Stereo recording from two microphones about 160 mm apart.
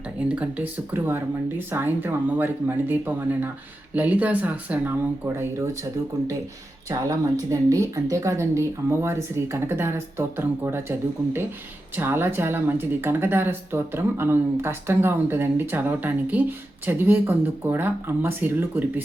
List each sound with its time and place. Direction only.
0.3 s speech: 10° right (ahead or behind)
11.9 s speech: 15° right (ahead or behind)